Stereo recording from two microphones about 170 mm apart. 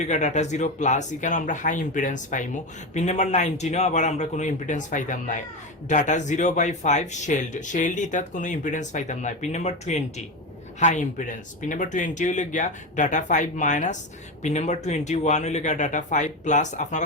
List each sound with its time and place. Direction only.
0.0 s speech: 45° left (ahead or behind)